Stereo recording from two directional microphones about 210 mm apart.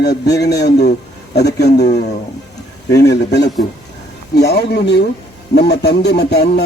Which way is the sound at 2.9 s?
55° left (ahead or behind).